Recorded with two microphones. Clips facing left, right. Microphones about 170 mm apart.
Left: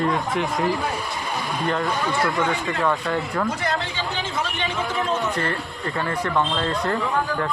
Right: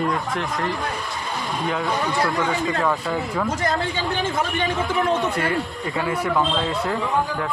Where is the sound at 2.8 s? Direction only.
5° right (ahead or behind).